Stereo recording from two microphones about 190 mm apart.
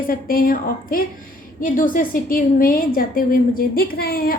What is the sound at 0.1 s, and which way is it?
A woman's voice, 50° left (ahead or behind).